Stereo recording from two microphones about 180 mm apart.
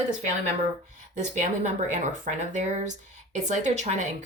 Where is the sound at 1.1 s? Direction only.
40° right (ahead or behind).